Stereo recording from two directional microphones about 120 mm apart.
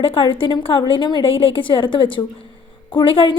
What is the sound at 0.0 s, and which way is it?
A woman's voice, 50° left (ahead or behind).